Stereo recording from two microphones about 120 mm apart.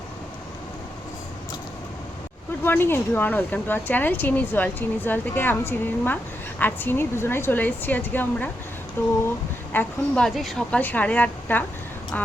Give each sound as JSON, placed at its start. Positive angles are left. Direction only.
{"t": 2.6, "sound": "speech", "side_deg": 20}
{"t": 9.7, "sound": "a woman's voice", "side_deg": 5}
{"t": 10.8, "sound": "speech", "side_deg": 15}